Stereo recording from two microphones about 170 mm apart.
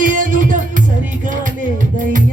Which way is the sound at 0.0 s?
50° right (ahead or behind).